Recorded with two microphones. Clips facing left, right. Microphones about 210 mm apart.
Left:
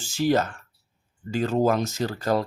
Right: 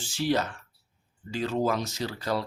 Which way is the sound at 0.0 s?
45° left (ahead or behind).